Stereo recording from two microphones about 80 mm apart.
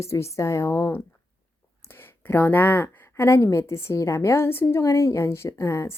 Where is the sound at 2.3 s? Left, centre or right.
Left.